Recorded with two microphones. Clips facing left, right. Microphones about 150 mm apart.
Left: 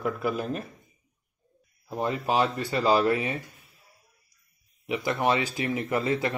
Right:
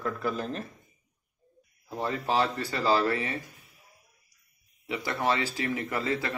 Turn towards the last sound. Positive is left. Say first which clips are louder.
# left 4 dB
turn(degrees=20)  # may be behind; listen again after turning